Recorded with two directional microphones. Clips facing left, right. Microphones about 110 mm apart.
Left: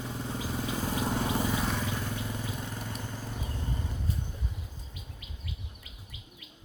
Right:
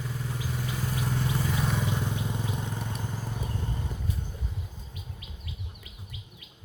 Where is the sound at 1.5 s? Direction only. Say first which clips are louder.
Right 1 dB; centre (ahead or behind).